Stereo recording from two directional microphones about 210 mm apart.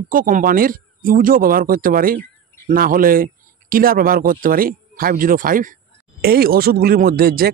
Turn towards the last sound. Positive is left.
turn(degrees=-45)  # may be behind; listen again after turning